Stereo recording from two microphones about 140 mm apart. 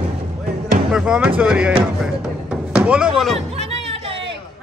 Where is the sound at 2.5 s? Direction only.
10° right (ahead or behind).